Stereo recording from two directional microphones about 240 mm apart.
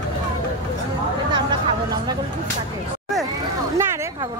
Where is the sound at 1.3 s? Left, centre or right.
Centre.